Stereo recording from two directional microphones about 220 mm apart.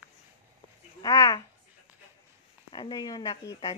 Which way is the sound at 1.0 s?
15° left (ahead or behind).